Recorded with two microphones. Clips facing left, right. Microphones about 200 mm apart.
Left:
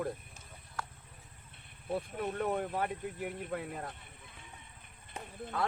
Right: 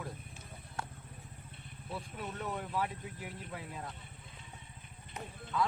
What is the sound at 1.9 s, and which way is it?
Speech, 55° left (ahead or behind).